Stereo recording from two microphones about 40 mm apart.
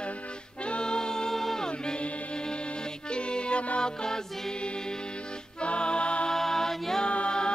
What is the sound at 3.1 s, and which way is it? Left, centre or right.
Music, left.